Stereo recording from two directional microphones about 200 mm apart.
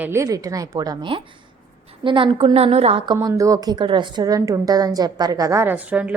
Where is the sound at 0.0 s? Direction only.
15° right (ahead or behind); by 3.2 s 30° right (ahead or behind).